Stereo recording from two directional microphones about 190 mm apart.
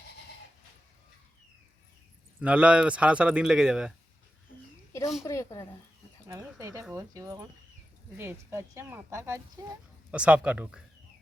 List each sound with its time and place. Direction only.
2.4 s speech: 5° right (ahead or behind)
4.9 s a sound: 15° left (ahead or behind)
5.2 s speech: 15° left (ahead or behind)
6.2 s speech: 15° right (ahead or behind)